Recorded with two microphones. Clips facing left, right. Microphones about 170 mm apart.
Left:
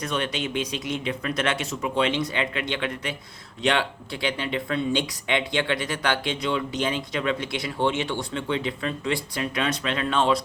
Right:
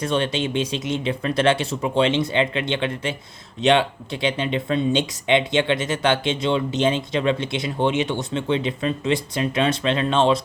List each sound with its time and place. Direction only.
0.0 s speech: 30° right (ahead or behind)